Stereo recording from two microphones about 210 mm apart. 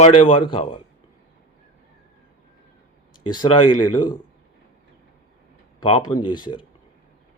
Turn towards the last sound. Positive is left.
turn(degrees=20)  # may be behind; listen again after turning